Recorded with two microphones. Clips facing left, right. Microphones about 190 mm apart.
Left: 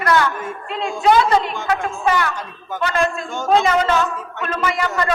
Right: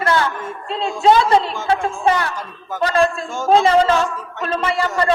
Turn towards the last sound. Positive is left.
turn(degrees=-30)  # may be behind; listen again after turning